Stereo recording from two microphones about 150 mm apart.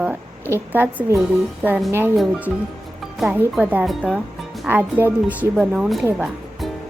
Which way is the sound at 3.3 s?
10° right (ahead or behind).